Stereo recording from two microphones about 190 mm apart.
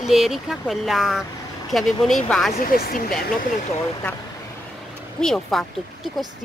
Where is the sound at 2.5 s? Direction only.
50° left (ahead or behind).